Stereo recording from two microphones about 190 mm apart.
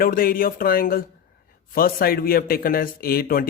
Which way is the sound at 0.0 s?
50° left (ahead or behind).